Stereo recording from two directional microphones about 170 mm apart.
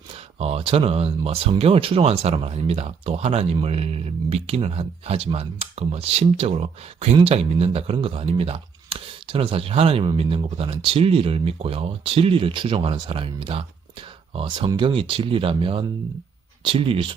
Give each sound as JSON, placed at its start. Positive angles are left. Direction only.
{"t": 0.3, "sound": "speech", "side_deg": -35}